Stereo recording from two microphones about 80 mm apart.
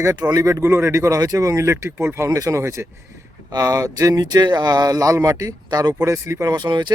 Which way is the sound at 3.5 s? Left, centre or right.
Right.